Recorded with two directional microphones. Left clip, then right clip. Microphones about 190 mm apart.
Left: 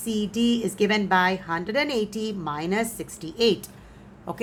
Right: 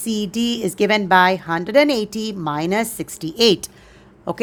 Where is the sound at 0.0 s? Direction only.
45° right (ahead or behind).